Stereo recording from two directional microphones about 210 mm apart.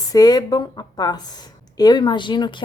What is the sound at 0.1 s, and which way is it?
Speech, 20° left (ahead or behind).